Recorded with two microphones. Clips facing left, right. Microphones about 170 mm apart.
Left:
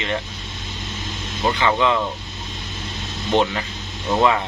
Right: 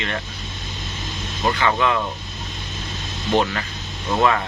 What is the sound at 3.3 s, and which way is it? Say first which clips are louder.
Speech: left 1 dB; 20° left (ahead or behind).